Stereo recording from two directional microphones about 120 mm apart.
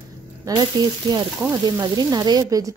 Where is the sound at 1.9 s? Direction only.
35° right (ahead or behind).